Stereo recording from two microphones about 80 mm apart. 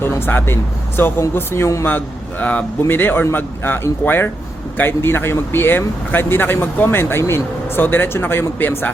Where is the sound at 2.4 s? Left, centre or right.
Centre.